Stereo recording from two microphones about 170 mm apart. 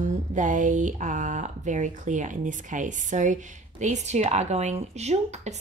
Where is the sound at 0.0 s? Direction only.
45° right (ahead or behind).